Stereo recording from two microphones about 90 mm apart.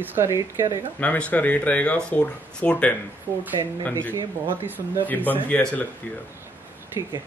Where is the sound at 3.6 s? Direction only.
50° right (ahead or behind).